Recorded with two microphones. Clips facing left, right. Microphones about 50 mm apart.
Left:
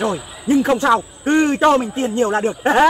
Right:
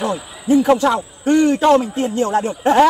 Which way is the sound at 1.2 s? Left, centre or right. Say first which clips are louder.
Right 5 dB; left.